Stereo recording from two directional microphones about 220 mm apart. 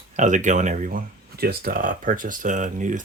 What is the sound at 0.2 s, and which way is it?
Speech, 35° right (ahead or behind).